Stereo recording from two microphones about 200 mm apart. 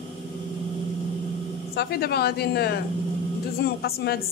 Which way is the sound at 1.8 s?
50° left (ahead or behind).